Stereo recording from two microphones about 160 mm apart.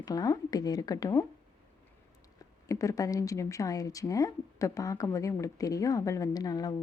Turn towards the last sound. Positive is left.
turn(degrees=25)  # may be behind; listen again after turning